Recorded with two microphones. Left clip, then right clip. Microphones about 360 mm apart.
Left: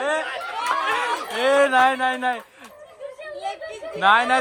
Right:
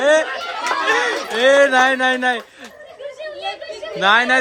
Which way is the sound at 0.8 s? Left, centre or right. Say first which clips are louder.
Right 5 dB; centre.